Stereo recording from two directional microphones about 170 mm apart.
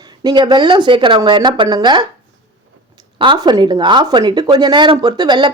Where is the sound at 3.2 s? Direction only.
25° right (ahead or behind).